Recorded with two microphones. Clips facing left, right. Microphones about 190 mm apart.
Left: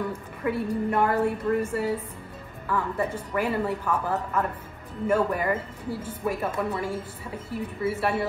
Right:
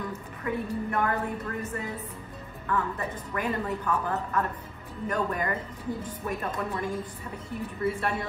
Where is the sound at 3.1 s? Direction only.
10° left (ahead or behind).